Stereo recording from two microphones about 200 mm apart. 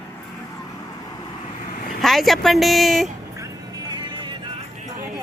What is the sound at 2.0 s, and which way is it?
Speech, centre (ahead or behind).